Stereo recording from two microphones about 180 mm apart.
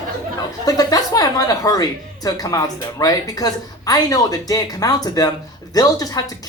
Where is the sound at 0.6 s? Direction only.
20° left (ahead or behind).